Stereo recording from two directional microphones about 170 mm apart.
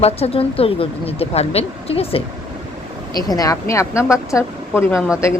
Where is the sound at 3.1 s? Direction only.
20° left (ahead or behind).